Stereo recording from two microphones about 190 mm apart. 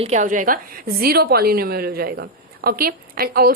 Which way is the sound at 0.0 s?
40° right (ahead or behind).